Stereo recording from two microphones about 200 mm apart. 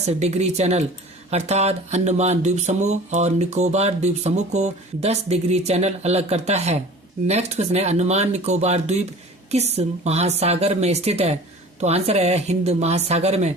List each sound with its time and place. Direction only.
0.1 s speech: 35° right (ahead or behind)